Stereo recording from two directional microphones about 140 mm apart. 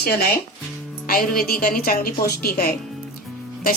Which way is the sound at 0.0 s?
90° left.